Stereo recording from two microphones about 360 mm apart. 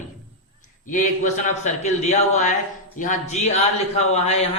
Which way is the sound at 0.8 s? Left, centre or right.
Left.